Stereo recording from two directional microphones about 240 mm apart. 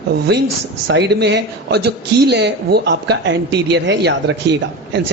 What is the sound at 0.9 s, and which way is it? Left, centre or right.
Speech, right.